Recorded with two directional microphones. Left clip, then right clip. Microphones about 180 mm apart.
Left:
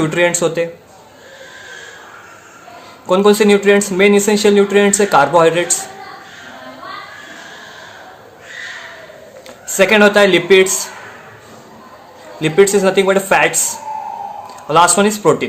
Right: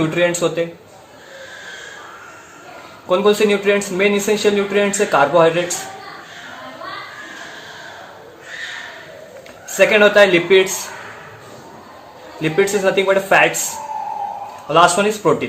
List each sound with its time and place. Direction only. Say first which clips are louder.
0.1 s speech: left 3 dB; 45° left (ahead or behind)
3.1 s speech: left 4 dB; 40° left (ahead or behind)
9.7 s speech: left 1 dB; 40° left (ahead or behind)
12.4 s speech: left 5 dB; 40° left (ahead or behind)
14.7 s speech: left 2 dB; 40° left (ahead or behind)